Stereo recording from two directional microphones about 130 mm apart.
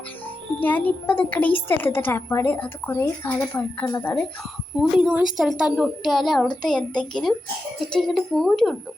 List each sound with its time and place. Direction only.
0.6 s a woman's voice: 15° left (ahead or behind)
4.8 s a woman's voice: 10° right (ahead or behind)